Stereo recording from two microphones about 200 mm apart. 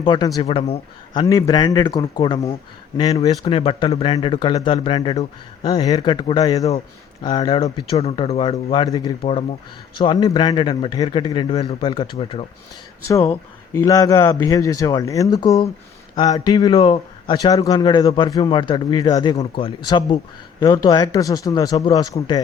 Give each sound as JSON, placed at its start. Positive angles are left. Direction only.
{"t": 0.0, "sound": "speech", "side_deg": 25}
{"t": 13.1, "sound": "speech", "side_deg": 15}